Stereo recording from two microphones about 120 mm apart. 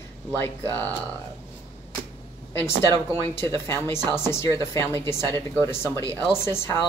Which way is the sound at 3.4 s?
20° left (ahead or behind).